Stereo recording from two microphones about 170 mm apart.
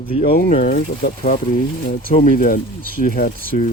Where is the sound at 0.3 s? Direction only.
55° left (ahead or behind).